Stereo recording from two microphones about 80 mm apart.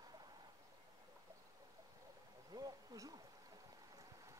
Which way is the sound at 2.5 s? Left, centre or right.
Right.